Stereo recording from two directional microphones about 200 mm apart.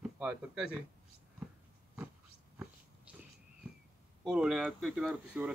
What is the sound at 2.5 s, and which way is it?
Dog, 5° right (ahead or behind).